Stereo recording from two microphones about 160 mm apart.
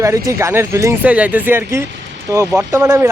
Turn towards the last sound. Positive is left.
turn(degrees=-15)  # may be behind; listen again after turning